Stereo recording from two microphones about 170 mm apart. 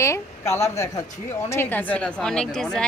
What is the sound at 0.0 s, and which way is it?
A woman's voice, 15° left (ahead or behind).